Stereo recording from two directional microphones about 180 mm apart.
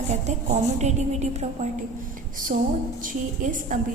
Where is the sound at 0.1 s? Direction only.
40° right (ahead or behind).